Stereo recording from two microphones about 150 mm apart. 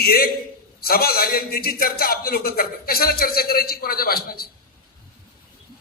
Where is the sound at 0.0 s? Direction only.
90° left.